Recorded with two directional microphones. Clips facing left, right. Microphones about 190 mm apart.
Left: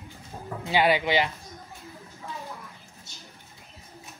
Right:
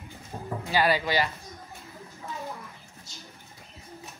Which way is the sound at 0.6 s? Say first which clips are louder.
Left 2 dB; 20° left (ahead or behind).